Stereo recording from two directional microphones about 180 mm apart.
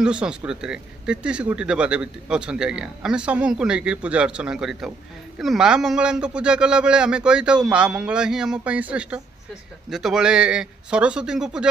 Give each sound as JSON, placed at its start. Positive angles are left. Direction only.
{"t": 0.0, "sound": "speech", "side_deg": -5}